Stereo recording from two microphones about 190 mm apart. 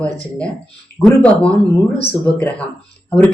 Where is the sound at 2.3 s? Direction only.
5° left (ahead or behind).